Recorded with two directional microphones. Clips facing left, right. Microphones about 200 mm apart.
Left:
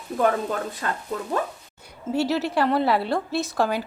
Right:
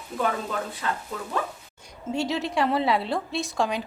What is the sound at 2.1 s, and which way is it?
A woman's voice, 5° left (ahead or behind).